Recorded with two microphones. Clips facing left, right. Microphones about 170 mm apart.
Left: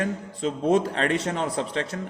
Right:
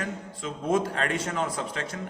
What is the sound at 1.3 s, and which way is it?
Speech, 35° left (ahead or behind).